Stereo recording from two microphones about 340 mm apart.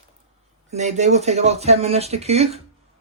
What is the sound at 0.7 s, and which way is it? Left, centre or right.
Speech, centre.